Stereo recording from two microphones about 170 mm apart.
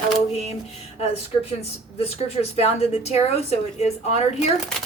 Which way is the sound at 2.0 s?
35° left (ahead or behind).